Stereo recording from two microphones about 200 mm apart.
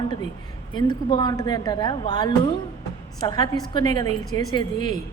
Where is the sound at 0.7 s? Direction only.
25° left (ahead or behind).